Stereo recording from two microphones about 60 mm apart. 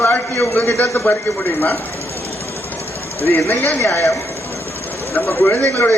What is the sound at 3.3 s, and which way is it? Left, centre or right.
Speech, left.